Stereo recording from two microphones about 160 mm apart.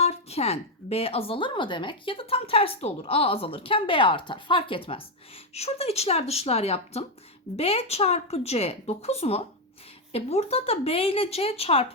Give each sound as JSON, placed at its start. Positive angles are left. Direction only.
{"t": 0.0, "sound": "speech", "side_deg": 40}